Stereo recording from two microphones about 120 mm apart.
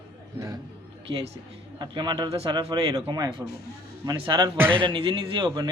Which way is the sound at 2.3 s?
50° right (ahead or behind).